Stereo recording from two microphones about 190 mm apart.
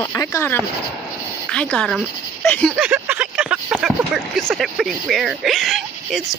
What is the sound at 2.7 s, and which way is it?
Speech, 5° right (ahead or behind).